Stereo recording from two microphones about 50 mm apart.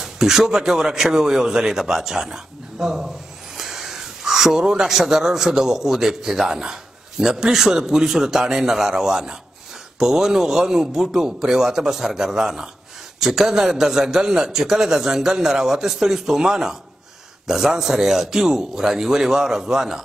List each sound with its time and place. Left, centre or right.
0.0 s a man's voice: centre